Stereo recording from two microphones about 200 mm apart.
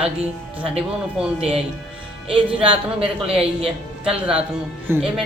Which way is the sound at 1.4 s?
30° right (ahead or behind).